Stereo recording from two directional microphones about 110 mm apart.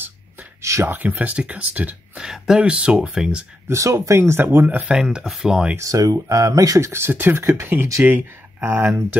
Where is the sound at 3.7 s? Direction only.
25° right (ahead or behind); by 5.7 s 5° right (ahead or behind).